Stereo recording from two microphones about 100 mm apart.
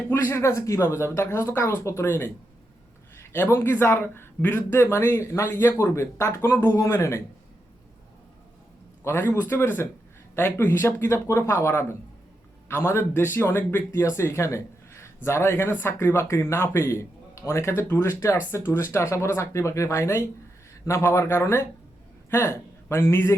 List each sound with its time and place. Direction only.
0.1 s speech: 25° left (ahead or behind)
9.0 s a man's voice: 25° left (ahead or behind)